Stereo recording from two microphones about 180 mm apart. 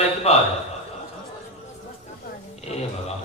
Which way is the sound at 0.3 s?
35° left (ahead or behind).